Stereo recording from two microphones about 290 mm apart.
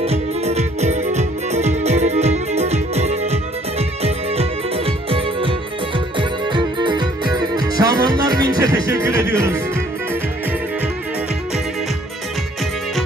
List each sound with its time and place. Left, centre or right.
0.0 s music: right